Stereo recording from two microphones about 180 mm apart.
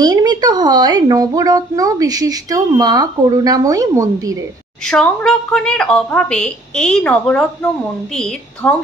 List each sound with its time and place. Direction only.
0.0 s speech: 20° right (ahead or behind)
4.8 s a woman's voice: 5° left (ahead or behind)